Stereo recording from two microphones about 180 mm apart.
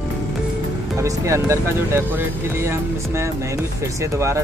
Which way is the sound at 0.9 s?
15° right (ahead or behind).